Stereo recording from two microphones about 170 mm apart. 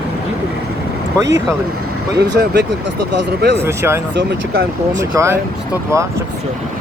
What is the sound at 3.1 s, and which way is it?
Speech, 90° right.